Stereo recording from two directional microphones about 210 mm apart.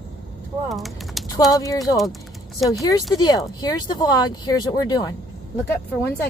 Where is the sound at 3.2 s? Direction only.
20° left (ahead or behind).